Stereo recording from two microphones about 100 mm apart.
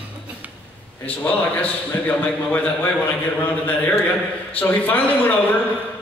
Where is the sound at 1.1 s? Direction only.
15° left (ahead or behind).